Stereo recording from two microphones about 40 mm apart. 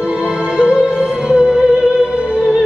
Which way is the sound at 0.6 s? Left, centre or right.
Right.